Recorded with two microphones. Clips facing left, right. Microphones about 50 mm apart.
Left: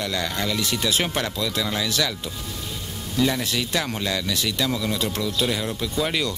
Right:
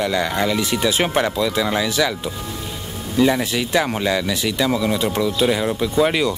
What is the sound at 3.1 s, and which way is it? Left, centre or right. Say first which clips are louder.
Speech: right 6 dB; centre.